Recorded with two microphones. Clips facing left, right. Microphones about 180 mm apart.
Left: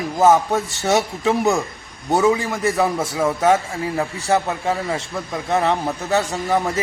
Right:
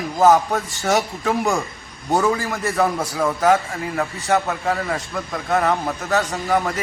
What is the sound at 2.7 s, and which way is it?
Speech, centre (ahead or behind).